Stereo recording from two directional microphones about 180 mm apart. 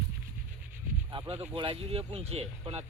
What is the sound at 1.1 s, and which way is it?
Speech, 30° right (ahead or behind).